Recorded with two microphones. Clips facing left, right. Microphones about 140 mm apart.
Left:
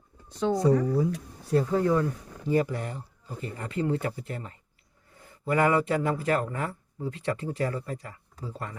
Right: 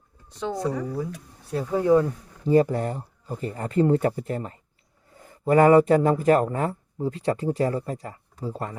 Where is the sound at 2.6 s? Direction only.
40° right (ahead or behind).